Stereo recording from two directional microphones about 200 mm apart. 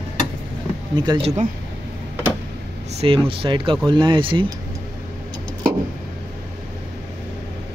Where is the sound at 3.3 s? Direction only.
25° right (ahead or behind).